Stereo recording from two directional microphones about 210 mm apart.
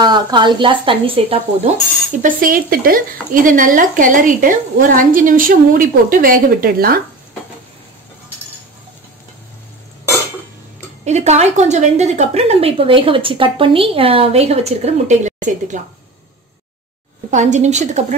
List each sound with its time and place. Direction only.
0.0 s speech: 20° right (ahead or behind)
2.2 s a woman's voice: 40° right (ahead or behind)
11.1 s speech: 30° right (ahead or behind)
17.3 s a woman's voice: 35° right (ahead or behind)